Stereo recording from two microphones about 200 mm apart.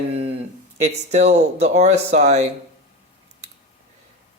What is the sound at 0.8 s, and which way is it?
Speech, 35° right (ahead or behind).